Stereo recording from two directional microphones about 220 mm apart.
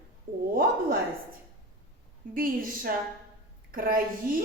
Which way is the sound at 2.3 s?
40° right (ahead or behind).